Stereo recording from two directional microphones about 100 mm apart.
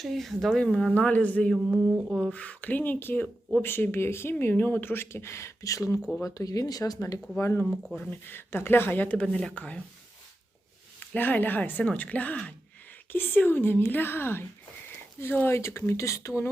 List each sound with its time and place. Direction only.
0.0 s speech: centre (ahead or behind)
1.5 s a sound: 15° right (ahead or behind)
2.3 s speech: 15° left (ahead or behind)
11.0 s speech: 15° left (ahead or behind)